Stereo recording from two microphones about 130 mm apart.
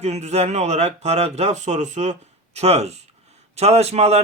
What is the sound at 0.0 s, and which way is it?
A man's voice, 60° right (ahead or behind).